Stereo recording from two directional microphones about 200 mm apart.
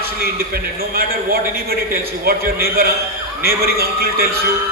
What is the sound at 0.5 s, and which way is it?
A man's voice, 50° right (ahead or behind).